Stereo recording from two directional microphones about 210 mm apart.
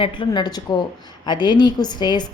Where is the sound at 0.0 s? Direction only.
20° left (ahead or behind).